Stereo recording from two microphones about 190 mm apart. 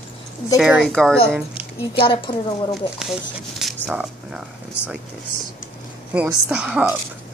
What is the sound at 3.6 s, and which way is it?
Speech, centre (ahead or behind).